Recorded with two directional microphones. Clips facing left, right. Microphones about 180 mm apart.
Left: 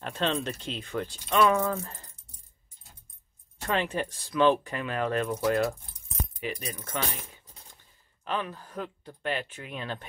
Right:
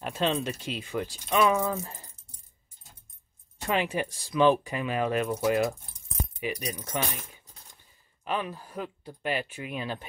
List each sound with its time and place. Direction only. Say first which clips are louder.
0.0 s speech: right 1 dB; 10° right (ahead or behind)
3.6 s speech: right 1 dB; 10° right (ahead or behind)